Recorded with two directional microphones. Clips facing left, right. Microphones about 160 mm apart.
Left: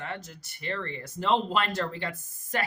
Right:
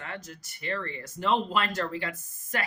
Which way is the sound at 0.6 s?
30° left (ahead or behind).